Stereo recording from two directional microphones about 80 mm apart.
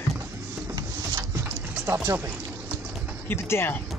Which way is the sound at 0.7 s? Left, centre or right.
Right.